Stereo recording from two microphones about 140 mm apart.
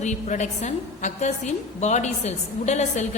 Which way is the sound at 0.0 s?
55° left (ahead or behind).